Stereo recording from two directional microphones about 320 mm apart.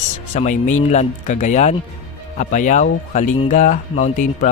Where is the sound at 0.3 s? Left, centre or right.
Left.